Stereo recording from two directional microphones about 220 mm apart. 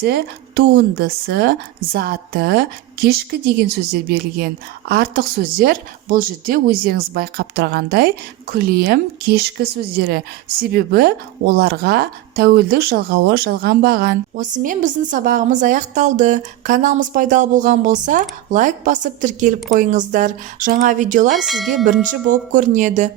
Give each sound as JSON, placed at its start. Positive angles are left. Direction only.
{"t": 0.0, "sound": "a woman's voice", "side_deg": -45}
{"t": 21.4, "sound": "speech", "side_deg": 0}
{"t": 22.3, "sound": "speech", "side_deg": -35}